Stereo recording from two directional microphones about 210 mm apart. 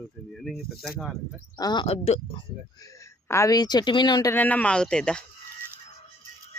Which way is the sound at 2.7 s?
15° left (ahead or behind).